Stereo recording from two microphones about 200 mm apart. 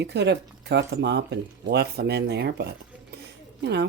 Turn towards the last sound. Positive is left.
turn(degrees=-60)  # may be behind; listen again after turning